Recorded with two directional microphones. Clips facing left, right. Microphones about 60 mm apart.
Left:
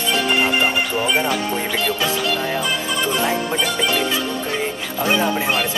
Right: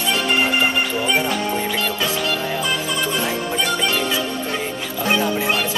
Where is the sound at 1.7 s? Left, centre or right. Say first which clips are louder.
Left 1 dB; centre.